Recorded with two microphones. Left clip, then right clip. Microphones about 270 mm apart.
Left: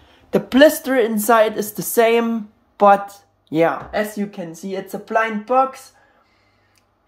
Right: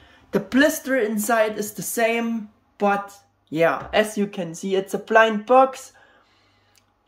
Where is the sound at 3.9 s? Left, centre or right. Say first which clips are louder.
Right 2 dB; centre.